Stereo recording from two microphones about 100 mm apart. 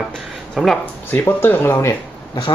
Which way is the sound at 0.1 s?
5° left (ahead or behind).